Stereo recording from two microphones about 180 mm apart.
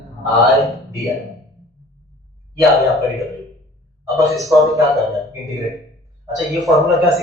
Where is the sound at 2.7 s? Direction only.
Centre (ahead or behind).